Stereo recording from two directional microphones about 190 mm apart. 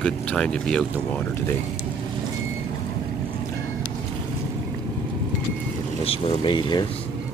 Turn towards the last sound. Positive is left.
turn(degrees=25)  # may be behind; listen again after turning